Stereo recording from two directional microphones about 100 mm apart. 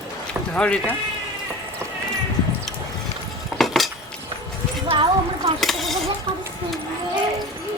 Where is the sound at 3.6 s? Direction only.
Centre (ahead or behind).